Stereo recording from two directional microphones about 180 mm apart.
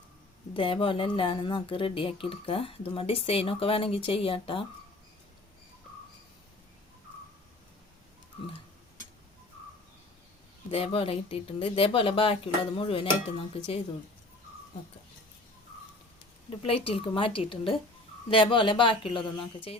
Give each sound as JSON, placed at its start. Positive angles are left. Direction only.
{"t": 0.5, "sound": "speech", "side_deg": 30}
{"t": 10.7, "sound": "speech", "side_deg": 35}
{"t": 16.5, "sound": "speech", "side_deg": 30}